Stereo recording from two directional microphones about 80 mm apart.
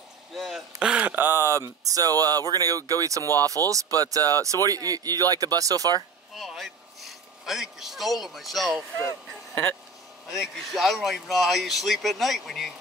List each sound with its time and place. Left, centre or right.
0.3 s a sound: centre
0.9 s speech: right
3.2 s speech: left
3.4 s speech: right
6.3 s a sound: centre
10.3 s speech: centre